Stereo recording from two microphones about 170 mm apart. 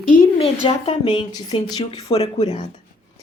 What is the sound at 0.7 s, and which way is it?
A woman's voice, 25° left (ahead or behind).